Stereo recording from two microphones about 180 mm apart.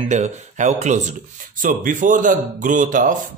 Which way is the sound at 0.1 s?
40° right (ahead or behind).